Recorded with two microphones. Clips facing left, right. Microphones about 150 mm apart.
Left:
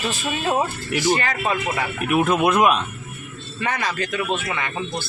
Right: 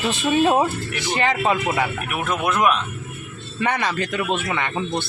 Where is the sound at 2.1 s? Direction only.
20° left (ahead or behind).